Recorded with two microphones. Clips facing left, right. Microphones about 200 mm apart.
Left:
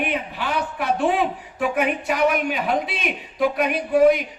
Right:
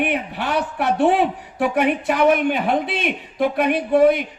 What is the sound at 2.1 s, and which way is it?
A man's voice, 55° right (ahead or behind).